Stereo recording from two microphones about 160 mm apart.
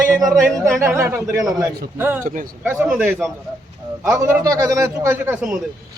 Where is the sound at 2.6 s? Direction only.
10° right (ahead or behind).